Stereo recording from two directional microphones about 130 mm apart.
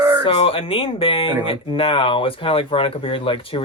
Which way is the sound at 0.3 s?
45° left (ahead or behind).